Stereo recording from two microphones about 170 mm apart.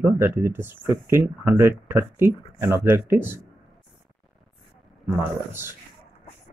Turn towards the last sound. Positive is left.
turn(degrees=-15)  # may be behind; listen again after turning